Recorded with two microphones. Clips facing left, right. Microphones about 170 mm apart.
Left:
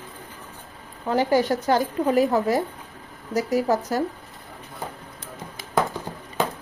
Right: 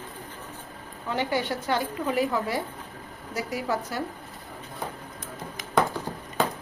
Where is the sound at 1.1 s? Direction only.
40° left (ahead or behind).